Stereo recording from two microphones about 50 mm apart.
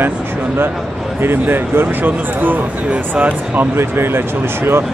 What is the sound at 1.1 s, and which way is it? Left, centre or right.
Speech, right.